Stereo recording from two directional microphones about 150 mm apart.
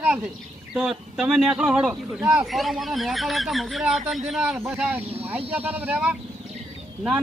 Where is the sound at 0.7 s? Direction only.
5° right (ahead or behind).